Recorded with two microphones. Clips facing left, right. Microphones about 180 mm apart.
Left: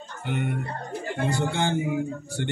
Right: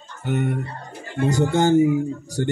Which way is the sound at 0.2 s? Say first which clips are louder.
Right 5 dB; 45° right (ahead or behind).